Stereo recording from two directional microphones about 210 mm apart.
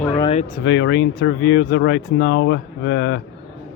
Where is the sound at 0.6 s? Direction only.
60° left (ahead or behind).